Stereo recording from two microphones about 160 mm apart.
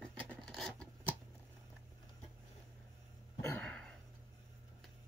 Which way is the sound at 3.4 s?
10° left (ahead or behind).